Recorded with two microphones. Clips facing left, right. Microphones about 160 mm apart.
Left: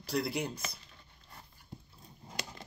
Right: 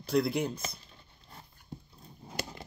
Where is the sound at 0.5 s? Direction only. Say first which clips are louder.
Right 2 dB; 30° right (ahead or behind).